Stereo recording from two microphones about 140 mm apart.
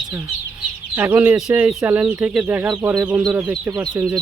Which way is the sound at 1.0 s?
10° right (ahead or behind).